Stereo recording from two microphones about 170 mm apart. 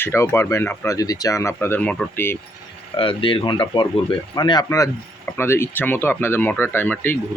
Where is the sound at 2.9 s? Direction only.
30° left (ahead or behind).